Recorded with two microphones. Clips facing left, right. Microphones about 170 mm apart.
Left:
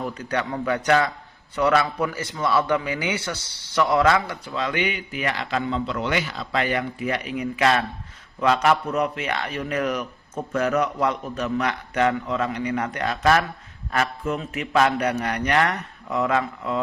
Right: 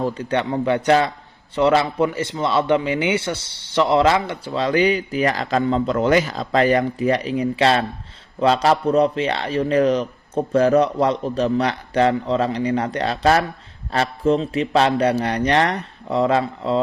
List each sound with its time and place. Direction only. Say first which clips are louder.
0.0 s a man's voice: right 5 dB; 30° right (ahead or behind)